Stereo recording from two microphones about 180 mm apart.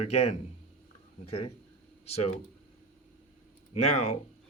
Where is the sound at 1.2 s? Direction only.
35° left (ahead or behind).